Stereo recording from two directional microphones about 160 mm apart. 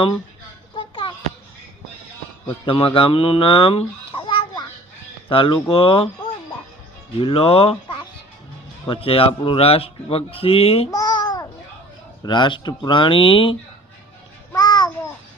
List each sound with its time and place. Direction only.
0.8 s a sound: 30° left (ahead or behind)
2.6 s a child's voice: 35° left (ahead or behind)
7.2 s speech: 35° left (ahead or behind)
10.9 s babbling: 25° left (ahead or behind)
12.2 s speech: 30° left (ahead or behind)
14.5 s a sound: 25° left (ahead or behind)